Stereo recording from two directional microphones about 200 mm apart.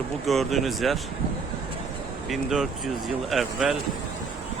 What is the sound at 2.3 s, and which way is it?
Speech, centre (ahead or behind).